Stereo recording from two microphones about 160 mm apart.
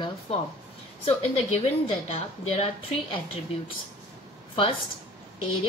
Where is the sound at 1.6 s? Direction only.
40° left (ahead or behind).